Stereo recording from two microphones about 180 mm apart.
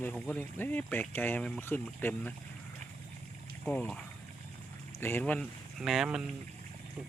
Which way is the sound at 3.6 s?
5° left (ahead or behind).